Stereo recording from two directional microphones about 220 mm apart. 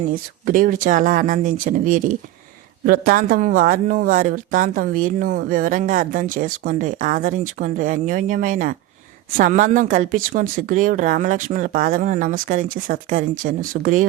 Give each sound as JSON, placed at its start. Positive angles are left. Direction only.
{"t": 0.1, "sound": "speech", "side_deg": -40}